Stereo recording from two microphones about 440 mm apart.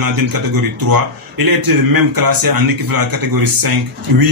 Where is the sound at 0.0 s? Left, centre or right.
Right.